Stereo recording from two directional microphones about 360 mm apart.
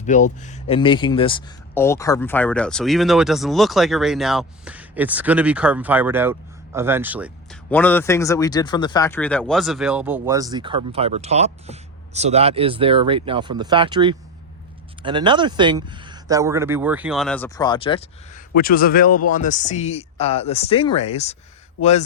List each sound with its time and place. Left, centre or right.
0.0 s speech: centre